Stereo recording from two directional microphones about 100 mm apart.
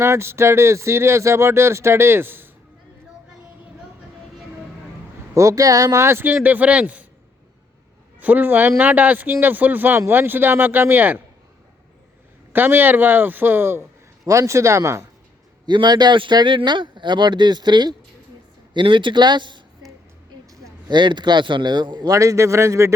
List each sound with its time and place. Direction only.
0.0 s speech: 25° right (ahead or behind)
5.3 s speech: 35° right (ahead or behind); by 7.1 s 15° right (ahead or behind)
8.2 s speech: 15° right (ahead or behind)
12.5 s speech: 20° right (ahead or behind)
15.6 s speech: 50° right (ahead or behind)
20.9 s speech: 50° right (ahead or behind); by 23.0 s 30° right (ahead or behind)